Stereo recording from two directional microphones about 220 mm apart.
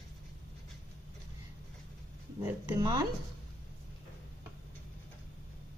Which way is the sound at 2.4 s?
15° right (ahead or behind).